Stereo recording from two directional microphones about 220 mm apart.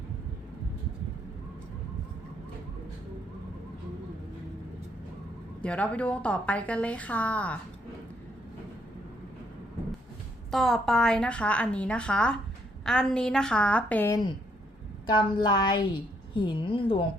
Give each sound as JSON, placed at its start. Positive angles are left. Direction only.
{"t": 5.6, "sound": "a woman's voice", "side_deg": 5}
{"t": 10.5, "sound": "a woman's voice", "side_deg": 0}
{"t": 15.0, "sound": "a woman's voice", "side_deg": 20}